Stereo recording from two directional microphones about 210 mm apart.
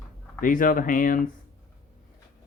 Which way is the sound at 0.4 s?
40° left (ahead or behind).